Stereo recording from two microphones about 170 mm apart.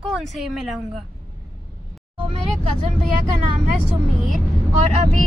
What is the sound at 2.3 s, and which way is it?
Speech, 40° right (ahead or behind).